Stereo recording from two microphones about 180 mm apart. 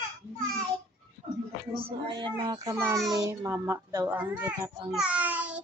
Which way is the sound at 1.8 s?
30° right (ahead or behind).